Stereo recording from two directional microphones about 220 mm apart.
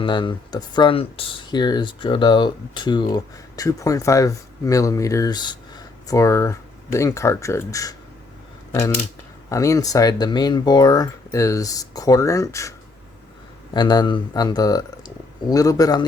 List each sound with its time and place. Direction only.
0.0 s speech: 20° left (ahead or behind)
9.5 s speech: 15° left (ahead or behind)
13.7 s speech: 20° left (ahead or behind)